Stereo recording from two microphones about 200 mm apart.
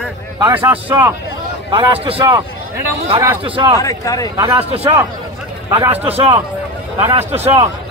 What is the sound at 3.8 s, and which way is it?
Speech, 15° left (ahead or behind).